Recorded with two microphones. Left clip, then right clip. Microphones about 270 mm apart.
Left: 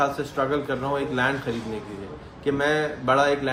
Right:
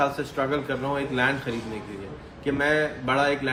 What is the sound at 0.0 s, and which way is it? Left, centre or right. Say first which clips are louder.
A man's voice: left 1 dB; centre.